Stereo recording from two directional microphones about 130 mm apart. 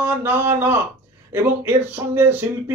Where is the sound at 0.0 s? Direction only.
15° right (ahead or behind).